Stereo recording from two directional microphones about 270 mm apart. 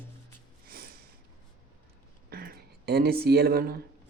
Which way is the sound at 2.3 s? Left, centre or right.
Right.